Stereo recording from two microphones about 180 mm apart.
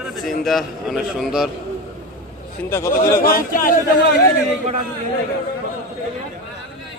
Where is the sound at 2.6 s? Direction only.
15° left (ahead or behind).